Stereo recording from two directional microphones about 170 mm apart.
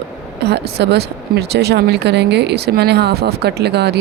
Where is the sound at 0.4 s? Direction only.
80° right.